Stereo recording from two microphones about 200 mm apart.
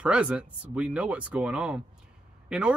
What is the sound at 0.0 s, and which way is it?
Speech, 5° right (ahead or behind).